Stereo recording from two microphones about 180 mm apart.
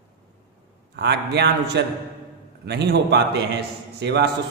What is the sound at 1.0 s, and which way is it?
A man's voice, 70° right (ahead or behind).